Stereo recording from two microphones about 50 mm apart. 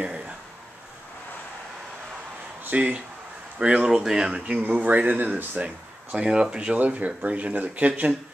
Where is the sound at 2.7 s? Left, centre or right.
Right.